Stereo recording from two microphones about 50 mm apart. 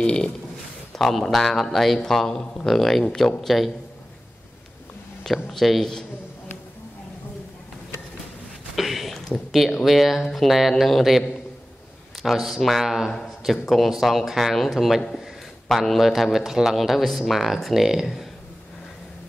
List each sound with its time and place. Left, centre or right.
0.0 s speech: centre
0.9 s speech: centre
5.2 s speech: centre
8.7 s a sound: centre
9.5 s speech: centre